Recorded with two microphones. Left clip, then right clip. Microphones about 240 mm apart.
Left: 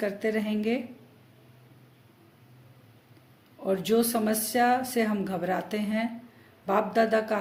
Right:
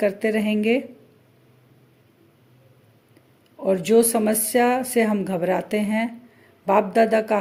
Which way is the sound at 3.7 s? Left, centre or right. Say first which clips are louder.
Right 8 dB; right.